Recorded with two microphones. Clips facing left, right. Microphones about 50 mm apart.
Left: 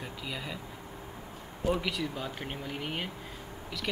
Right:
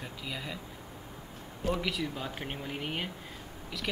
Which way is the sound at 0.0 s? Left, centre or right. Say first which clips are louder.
Left 1 dB; centre.